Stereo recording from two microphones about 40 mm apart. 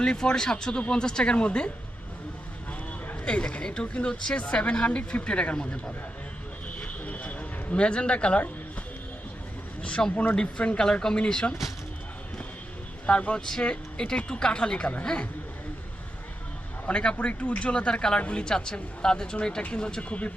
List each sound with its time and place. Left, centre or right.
0.0 s speech: left
3.2 s speech: left
6.7 s a sound: left
7.8 s speech: left
9.8 s speech: left
11.3 s speech: centre
13.1 s speech: left
16.8 s speech: left
17.2 s speech: left